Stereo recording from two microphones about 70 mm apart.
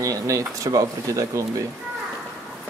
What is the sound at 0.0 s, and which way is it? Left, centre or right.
Speech, right.